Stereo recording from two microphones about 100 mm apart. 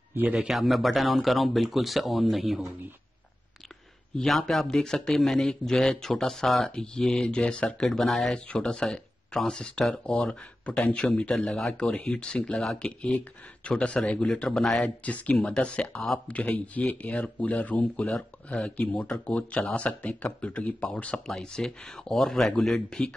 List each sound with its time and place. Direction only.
0.1 s a man's voice: 15° right (ahead or behind)
0.5 s a man's voice: centre (ahead or behind)
4.2 s a man's voice: 5° left (ahead or behind)